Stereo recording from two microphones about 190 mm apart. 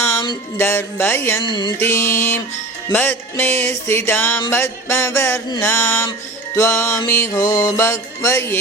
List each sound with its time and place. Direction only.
0.1 s music: 15° left (ahead or behind)
1.5 s music: 25° left (ahead or behind)
1.8 s music: 10° left (ahead or behind)